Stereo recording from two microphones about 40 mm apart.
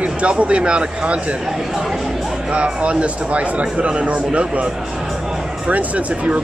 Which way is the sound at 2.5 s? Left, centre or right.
Right.